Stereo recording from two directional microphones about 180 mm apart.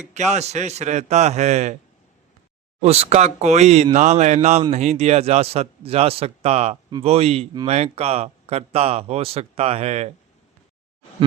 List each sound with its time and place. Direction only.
0.1 s a man's voice: 40° right (ahead or behind)
2.8 s a man's voice: 35° right (ahead or behind)